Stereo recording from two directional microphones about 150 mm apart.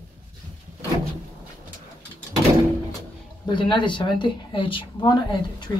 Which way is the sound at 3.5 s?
30° left (ahead or behind).